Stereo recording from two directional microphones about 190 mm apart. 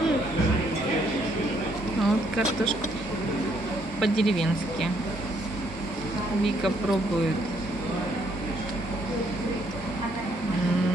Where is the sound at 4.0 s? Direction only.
Centre (ahead or behind).